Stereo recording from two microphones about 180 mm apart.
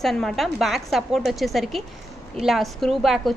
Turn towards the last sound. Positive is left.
turn(degrees=0)  # may be behind; listen again after turning